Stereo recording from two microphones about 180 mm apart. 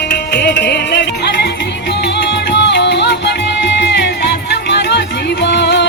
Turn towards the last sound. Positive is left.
turn(degrees=75)  # may be behind; listen again after turning